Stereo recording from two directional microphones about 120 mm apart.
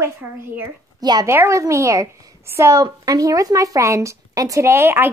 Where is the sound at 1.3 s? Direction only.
25° right (ahead or behind).